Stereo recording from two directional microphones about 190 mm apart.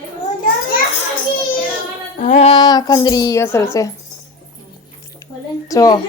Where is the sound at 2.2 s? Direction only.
40° left (ahead or behind).